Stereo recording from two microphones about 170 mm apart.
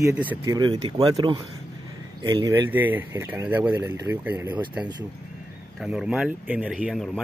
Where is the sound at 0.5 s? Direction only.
25° right (ahead or behind).